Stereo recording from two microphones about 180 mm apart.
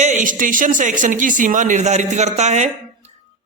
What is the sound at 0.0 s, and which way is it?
Speech, 45° right (ahead or behind).